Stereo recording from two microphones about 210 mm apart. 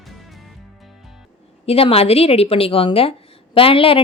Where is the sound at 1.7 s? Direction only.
30° left (ahead or behind).